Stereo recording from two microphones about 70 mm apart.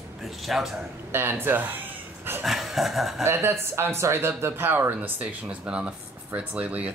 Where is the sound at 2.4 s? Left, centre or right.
Centre.